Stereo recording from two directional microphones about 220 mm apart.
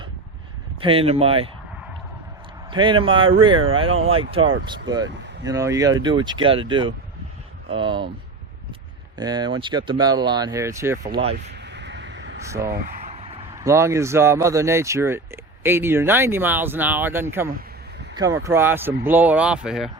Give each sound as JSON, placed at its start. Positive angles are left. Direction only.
{"t": 0.8, "sound": "speech", "side_deg": -25}
{"t": 2.6, "sound": "speech", "side_deg": -20}
{"t": 5.0, "sound": "speech", "side_deg": -55}
{"t": 5.5, "sound": "speech", "side_deg": -15}
{"t": 9.1, "sound": "speech", "side_deg": -20}
{"t": 11.6, "sound": "a sound", "side_deg": -50}
{"t": 12.4, "sound": "speech", "side_deg": -15}
{"t": 12.7, "sound": "a sound", "side_deg": -30}
{"t": 13.6, "sound": "speech", "side_deg": -15}